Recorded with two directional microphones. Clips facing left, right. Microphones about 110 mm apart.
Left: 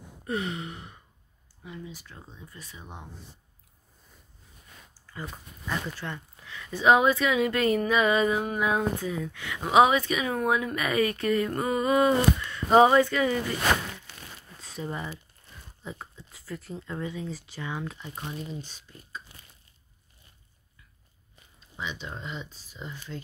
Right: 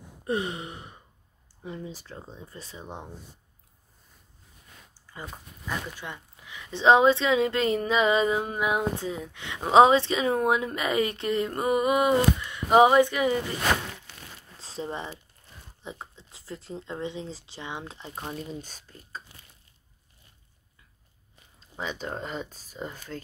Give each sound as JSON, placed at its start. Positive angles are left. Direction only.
{"t": 0.3, "sound": "speech", "side_deg": -25}
{"t": 5.1, "sound": "speech", "side_deg": -10}
{"t": 14.6, "sound": "speech", "side_deg": -30}
{"t": 21.5, "sound": "speech", "side_deg": -40}